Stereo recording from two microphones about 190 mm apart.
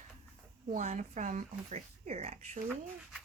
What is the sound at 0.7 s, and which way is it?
Speech, 40° right (ahead or behind).